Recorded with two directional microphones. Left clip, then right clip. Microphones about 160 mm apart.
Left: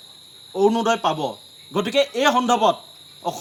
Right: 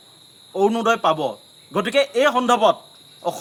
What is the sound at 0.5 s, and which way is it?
Speech, 45° right (ahead or behind).